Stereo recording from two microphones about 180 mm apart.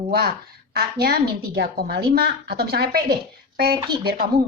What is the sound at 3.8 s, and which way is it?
Speech, 25° right (ahead or behind).